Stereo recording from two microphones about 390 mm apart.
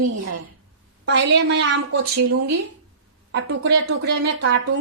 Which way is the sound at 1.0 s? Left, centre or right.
Right.